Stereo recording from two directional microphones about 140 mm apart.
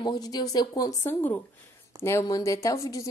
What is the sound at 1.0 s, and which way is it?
Speech, 15° left (ahead or behind).